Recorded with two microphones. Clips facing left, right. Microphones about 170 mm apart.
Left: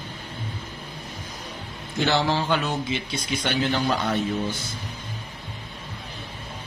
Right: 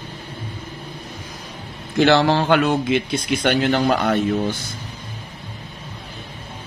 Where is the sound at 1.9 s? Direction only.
75° right (ahead or behind).